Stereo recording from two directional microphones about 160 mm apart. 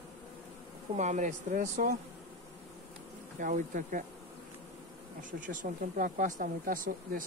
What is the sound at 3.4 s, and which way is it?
Speech, 55° right (ahead or behind).